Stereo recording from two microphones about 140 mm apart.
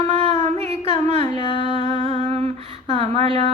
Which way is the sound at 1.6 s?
50° right (ahead or behind).